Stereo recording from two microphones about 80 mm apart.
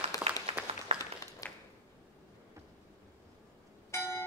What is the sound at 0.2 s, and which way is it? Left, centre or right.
Applause, centre.